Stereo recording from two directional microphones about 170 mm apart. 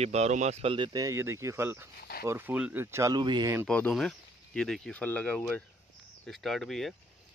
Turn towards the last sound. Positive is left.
turn(degrees=0)  # may be behind; listen again after turning